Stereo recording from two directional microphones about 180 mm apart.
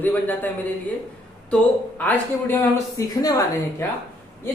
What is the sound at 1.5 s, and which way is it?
A woman's voice, 10° left (ahead or behind).